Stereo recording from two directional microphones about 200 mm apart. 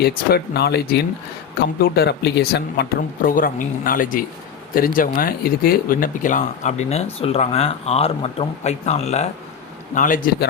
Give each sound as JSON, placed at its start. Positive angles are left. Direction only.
{"t": 0.0, "sound": "speech", "side_deg": 50}
{"t": 3.2, "sound": "speech", "side_deg": 45}